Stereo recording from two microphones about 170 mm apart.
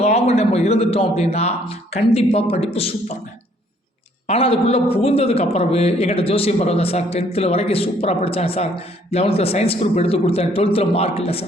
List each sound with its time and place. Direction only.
0.0 s a man's voice: 40° left (ahead or behind)
4.3 s a man's voice: 35° left (ahead or behind)